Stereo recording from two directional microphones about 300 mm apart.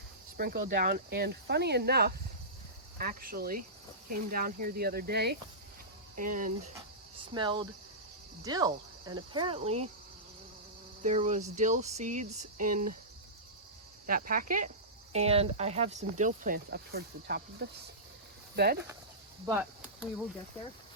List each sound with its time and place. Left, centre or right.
0.3 s speech: right
6.7 s cricket: centre
8.4 s speech: centre
11.0 s speech: right
14.1 s speech: right
19.5 s chop: centre